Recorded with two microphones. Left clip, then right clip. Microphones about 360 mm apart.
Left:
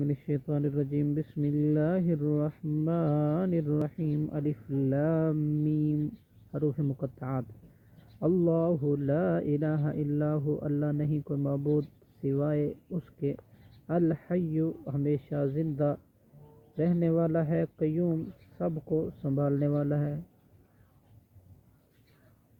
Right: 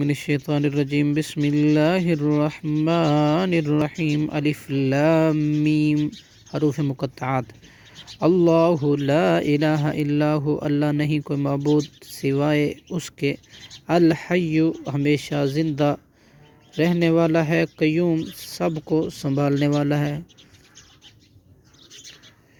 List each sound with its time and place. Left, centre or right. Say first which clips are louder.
0.0 s speech: right 9 dB; centre